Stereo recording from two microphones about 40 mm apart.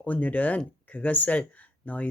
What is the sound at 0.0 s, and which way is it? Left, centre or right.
Speech, left.